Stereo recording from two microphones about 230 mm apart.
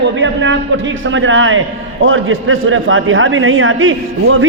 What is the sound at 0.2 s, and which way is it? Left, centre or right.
A man's voice, right.